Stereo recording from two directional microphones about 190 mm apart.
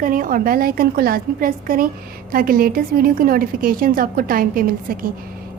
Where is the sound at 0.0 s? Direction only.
45° right (ahead or behind).